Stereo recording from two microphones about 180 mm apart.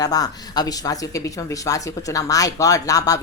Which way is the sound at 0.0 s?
20° left (ahead or behind).